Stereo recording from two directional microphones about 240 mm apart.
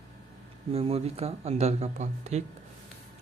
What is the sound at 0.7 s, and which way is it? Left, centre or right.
Speech, right.